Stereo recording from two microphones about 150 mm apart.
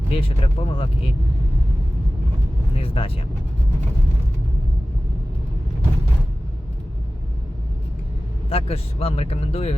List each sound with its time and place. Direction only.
0.1 s speech: 40° left (ahead or behind)
2.7 s speech: 40° left (ahead or behind)
8.4 s speech: 40° left (ahead or behind)